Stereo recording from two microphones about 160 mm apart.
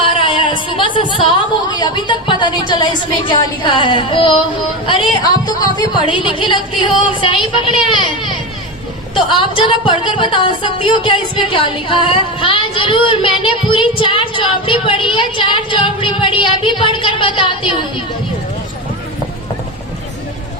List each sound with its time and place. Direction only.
0.0 s a sound: 35° left (ahead or behind)
1.8 s a woman's voice: 30° left (ahead or behind)
5.5 s a woman's voice: 25° left (ahead or behind)